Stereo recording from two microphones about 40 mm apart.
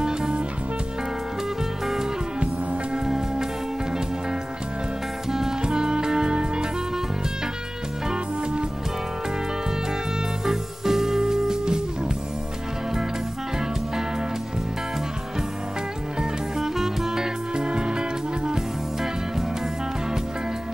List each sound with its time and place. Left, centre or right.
0.0 s music: centre
2.4 s music: right
3.1 s music: centre
5.3 s music: centre
8.1 s music: centre
10.4 s music: centre
16.2 s music: centre